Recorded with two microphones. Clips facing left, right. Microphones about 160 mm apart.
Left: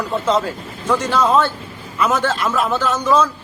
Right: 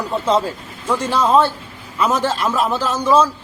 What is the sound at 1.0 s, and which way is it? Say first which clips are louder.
Speech: right 1 dB; 30° right (ahead or behind).